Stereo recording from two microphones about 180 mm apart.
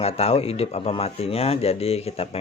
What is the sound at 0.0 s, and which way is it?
Speech, 35° left (ahead or behind).